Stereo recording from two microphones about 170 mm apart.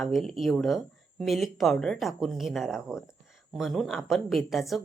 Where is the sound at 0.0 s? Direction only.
Centre (ahead or behind).